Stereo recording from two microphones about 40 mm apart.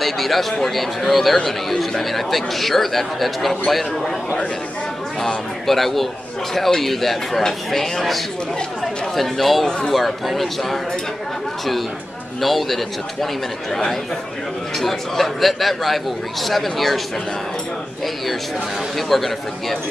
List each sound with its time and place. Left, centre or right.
0.0 s a man's voice: centre
5.7 s a man's voice: centre
9.7 s speech: centre
9.9 s a man's voice: centre
12.4 s a man's voice: centre
14.8 s a man's voice: centre
18.9 s a man's voice: centre